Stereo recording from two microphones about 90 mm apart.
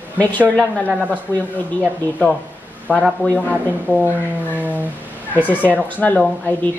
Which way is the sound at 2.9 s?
20° left (ahead or behind).